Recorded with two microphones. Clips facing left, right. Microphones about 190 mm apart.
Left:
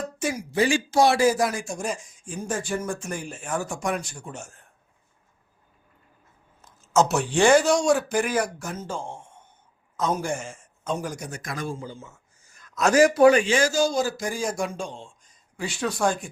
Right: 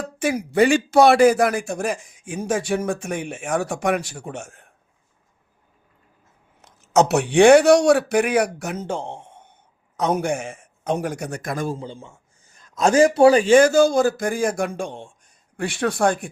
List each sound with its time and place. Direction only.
0.2 s speech: 60° right (ahead or behind)
2.5 s speech: 85° right; by 4.5 s 60° right (ahead or behind)
6.6 s speech: 70° right (ahead or behind); by 11.8 s 45° right (ahead or behind)
11.8 s a man's voice: 30° right (ahead or behind)
13.5 s speech: 55° right (ahead or behind)